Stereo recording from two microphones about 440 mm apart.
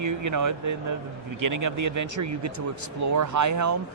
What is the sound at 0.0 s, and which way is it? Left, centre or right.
Speech, right.